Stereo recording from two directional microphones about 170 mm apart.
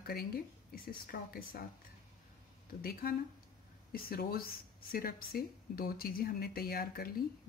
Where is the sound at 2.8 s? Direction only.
60° left (ahead or behind).